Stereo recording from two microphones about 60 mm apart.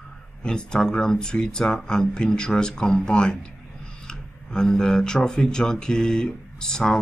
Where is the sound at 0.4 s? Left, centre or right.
Centre.